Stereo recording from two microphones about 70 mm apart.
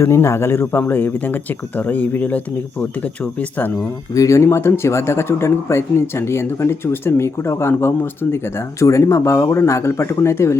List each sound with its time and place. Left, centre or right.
0.0 s speech: left
4.1 s speech: left
8.9 s speech: left